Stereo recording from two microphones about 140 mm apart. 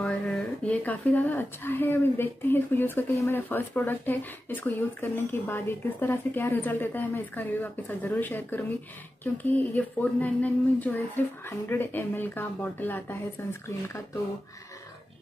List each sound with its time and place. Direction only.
0.0 s speech: 10° left (ahead or behind)